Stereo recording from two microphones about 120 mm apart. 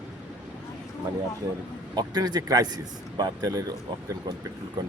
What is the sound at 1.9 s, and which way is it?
A man's voice, 35° right (ahead or behind).